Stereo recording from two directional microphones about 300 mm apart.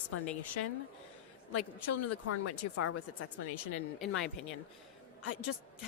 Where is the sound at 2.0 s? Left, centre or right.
Left.